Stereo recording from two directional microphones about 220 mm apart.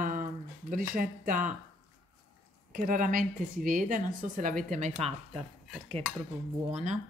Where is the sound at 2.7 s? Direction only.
35° right (ahead or behind).